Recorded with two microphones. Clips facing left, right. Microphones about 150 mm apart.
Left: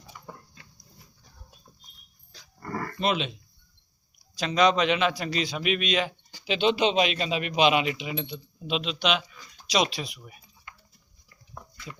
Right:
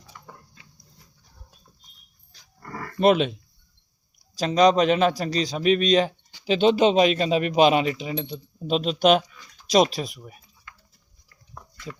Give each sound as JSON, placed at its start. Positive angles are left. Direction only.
{"t": 0.1, "sound": "a sound", "side_deg": 10}
{"t": 2.3, "sound": "dog", "side_deg": 90}
{"t": 3.0, "sound": "speech", "side_deg": -50}
{"t": 4.2, "sound": "speech", "side_deg": -40}